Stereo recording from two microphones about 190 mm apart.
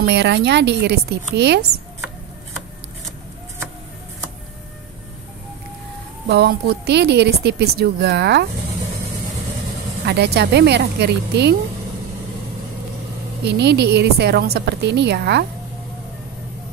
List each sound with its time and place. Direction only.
0.0 s a woman's voice: 65° right (ahead or behind)
6.2 s a woman's voice: 60° right (ahead or behind)
10.0 s a woman's voice: 60° right (ahead or behind)
13.5 s a woman's voice: 60° right (ahead or behind)